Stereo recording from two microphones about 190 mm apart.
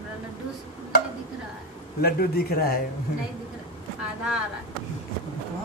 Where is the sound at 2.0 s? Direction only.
55° left (ahead or behind).